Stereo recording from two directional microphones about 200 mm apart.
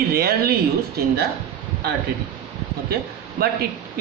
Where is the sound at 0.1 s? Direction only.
50° right (ahead or behind).